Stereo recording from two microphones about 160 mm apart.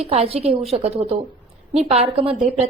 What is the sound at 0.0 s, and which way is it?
A woman's voice, 40° right (ahead or behind).